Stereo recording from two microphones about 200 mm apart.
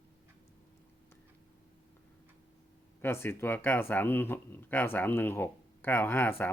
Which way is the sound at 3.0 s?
10° left (ahead or behind).